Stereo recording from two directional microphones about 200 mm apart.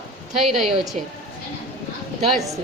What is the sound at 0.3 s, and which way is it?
Speech, centre (ahead or behind).